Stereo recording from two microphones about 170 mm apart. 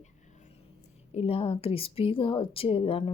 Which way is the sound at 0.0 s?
45° left (ahead or behind).